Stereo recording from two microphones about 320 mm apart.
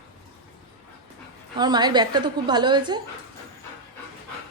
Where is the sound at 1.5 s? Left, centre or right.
Centre.